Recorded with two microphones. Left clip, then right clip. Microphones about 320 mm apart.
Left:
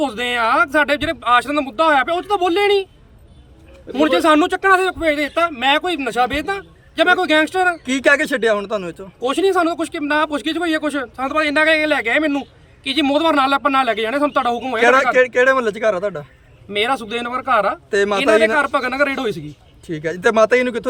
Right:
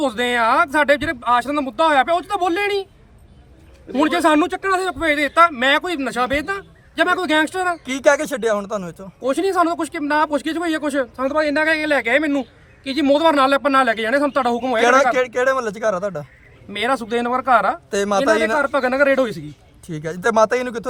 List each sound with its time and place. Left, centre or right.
0.0 s speech: centre
3.9 s speech: centre
7.9 s speech: right
9.2 s speech: centre
14.8 s speech: right
16.7 s speech: centre
17.9 s speech: centre
18.6 s speech: centre
19.9 s speech: centre